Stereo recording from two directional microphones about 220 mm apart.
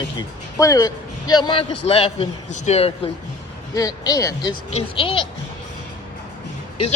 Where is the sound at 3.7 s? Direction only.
15° left (ahead or behind).